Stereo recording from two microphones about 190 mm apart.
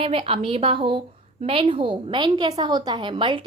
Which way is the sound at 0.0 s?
30° right (ahead or behind).